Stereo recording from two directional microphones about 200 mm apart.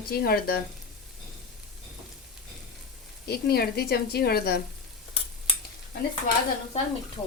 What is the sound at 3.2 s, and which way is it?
A woman's voice, 50° left (ahead or behind).